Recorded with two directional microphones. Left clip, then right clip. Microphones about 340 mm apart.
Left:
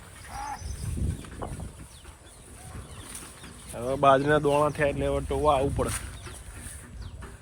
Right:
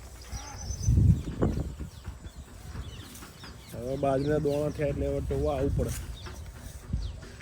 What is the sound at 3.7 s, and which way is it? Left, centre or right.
Speech, centre.